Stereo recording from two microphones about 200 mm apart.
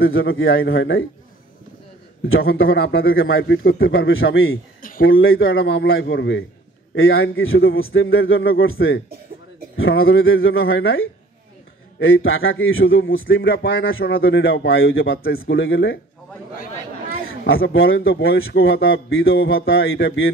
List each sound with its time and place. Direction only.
0.0 s speech: 85° left; by 1.0 s 70° left (ahead or behind)
2.5 s a man's voice: 80° left
3.8 s a man's voice: 80° left
5.4 s a man's voice: 65° left (ahead or behind)
7.0 s a man's voice: 85° left
13.4 s a man's voice: 60° left (ahead or behind)
17.7 s speech: 80° left; by 18.4 s 55° left (ahead or behind)
18.4 s a man's voice: 85° left